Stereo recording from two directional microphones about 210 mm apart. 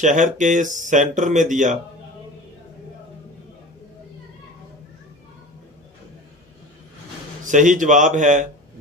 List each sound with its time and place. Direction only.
0.0 s speech: 35° right (ahead or behind)
7.4 s speech: 35° right (ahead or behind)